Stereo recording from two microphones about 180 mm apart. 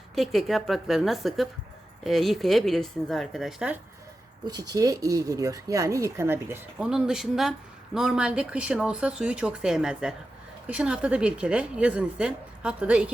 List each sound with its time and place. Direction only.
0.2 s a woman's voice: centre (ahead or behind)
4.4 s a woman's voice: 20° right (ahead or behind); by 13.1 s 5° right (ahead or behind)